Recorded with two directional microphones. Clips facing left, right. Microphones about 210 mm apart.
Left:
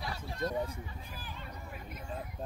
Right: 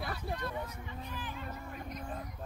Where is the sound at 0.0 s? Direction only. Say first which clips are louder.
Right 3 dB; 55° right (ahead or behind).